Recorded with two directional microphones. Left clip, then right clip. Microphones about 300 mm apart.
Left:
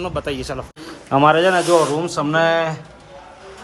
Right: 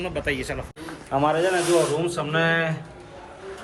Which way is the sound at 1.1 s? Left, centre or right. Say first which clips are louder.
Left 8 dB; left.